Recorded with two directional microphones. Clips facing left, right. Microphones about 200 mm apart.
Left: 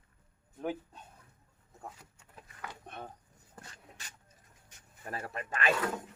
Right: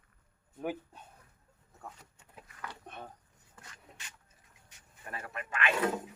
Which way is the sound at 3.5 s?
35° left (ahead or behind).